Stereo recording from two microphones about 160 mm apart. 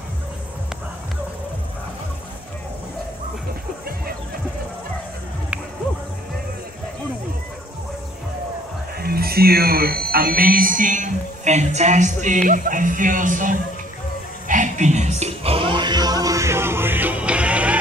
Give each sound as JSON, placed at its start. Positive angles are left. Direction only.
{"t": 8.9, "sound": "speech", "side_deg": -70}
{"t": 14.5, "sound": "music", "side_deg": -50}